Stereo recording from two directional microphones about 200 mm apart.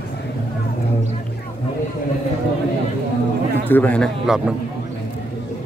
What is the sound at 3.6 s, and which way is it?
Speech, 10° left (ahead or behind).